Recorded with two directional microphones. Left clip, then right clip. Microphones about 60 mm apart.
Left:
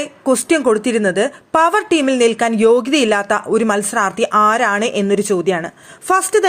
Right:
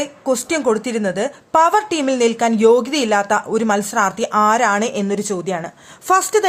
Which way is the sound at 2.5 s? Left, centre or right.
Left.